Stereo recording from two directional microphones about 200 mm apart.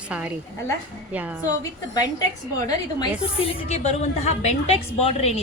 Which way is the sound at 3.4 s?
35° left (ahead or behind).